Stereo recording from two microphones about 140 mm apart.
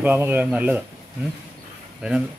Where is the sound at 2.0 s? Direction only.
5° right (ahead or behind).